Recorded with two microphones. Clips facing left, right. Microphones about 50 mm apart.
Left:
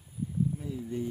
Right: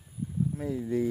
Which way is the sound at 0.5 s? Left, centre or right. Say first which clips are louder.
Right 6 dB; right.